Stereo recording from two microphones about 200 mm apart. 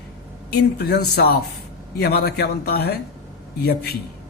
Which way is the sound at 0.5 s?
55° left (ahead or behind).